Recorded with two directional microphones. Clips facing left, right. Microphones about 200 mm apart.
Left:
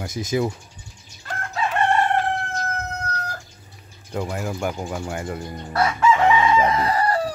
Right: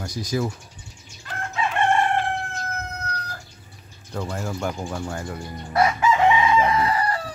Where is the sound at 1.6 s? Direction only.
40° left (ahead or behind).